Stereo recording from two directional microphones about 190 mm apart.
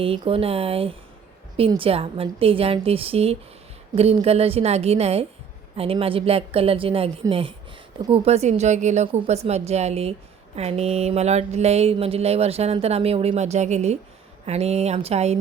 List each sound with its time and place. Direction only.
0.0 s a woman's voice: 30° right (ahead or behind)